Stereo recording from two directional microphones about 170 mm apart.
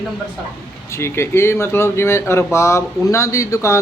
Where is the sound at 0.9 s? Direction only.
15° left (ahead or behind).